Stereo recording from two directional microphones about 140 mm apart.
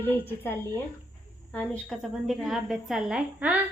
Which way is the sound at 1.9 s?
Centre (ahead or behind).